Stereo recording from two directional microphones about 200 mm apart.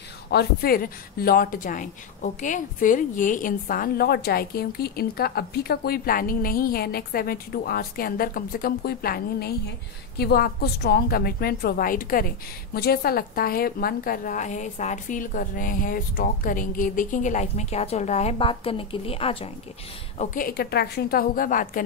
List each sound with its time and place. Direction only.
0.3 s a woman's voice: 50° left (ahead or behind); by 19.5 s 30° left (ahead or behind)
20.2 s speech: 45° left (ahead or behind)